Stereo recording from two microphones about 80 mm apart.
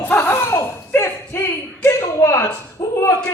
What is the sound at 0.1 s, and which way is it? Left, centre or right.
Laughter, left.